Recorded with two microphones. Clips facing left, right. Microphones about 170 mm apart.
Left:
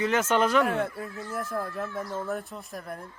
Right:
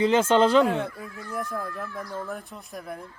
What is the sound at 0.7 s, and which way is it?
Speech, 5° left (ahead or behind).